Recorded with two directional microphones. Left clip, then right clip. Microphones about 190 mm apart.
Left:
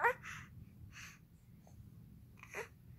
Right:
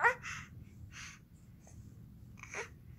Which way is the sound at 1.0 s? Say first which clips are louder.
Right 4 dB; 15° left (ahead or behind).